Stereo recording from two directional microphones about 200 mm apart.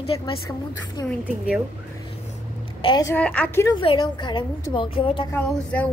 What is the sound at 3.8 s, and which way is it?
A woman's voice, 25° left (ahead or behind).